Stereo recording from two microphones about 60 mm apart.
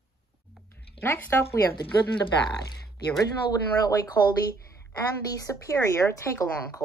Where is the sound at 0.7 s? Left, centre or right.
Left.